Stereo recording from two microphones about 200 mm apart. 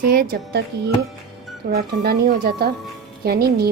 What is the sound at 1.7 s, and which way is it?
Speech, 50° right (ahead or behind).